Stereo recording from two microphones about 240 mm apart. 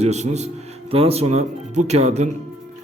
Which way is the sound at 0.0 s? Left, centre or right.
Right.